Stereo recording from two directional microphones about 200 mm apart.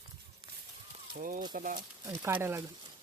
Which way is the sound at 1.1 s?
40° right (ahead or behind).